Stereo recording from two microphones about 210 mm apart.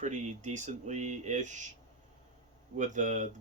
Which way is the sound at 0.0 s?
35° right (ahead or behind).